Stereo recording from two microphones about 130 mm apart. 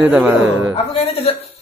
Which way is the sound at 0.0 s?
10° right (ahead or behind).